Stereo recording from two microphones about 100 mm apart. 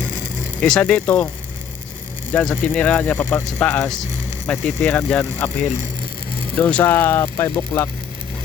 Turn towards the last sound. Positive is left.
turn(degrees=25)  # may be behind; listen again after turning